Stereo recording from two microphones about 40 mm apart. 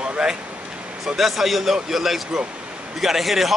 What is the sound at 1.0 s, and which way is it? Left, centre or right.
Speech, centre.